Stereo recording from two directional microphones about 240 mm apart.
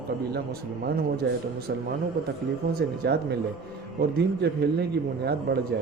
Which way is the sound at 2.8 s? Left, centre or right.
Right.